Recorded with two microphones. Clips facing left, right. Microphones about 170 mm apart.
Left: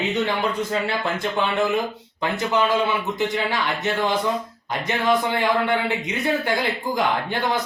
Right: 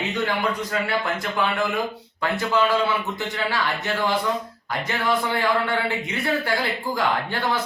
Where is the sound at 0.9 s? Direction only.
25° left (ahead or behind).